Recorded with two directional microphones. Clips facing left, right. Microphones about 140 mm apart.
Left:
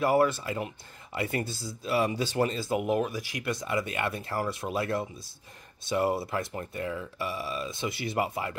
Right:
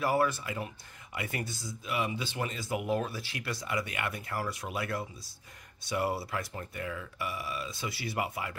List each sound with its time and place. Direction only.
0.0 s speech: 25° left (ahead or behind)